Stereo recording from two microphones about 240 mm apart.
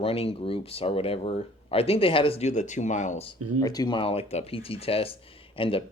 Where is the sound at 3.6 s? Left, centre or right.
Centre.